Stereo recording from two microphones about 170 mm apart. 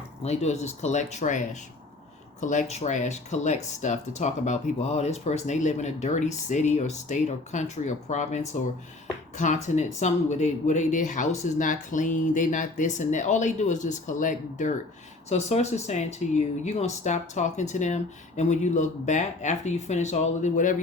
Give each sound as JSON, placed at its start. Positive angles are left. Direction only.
{"t": 0.2, "sound": "speech", "side_deg": 40}
{"t": 2.4, "sound": "speech", "side_deg": 45}
{"t": 9.6, "sound": "speech", "side_deg": 45}